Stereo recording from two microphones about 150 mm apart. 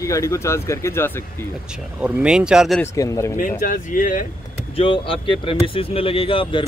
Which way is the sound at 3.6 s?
65° left (ahead or behind).